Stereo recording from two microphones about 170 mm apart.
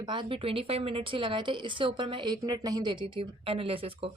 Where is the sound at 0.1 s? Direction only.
30° right (ahead or behind).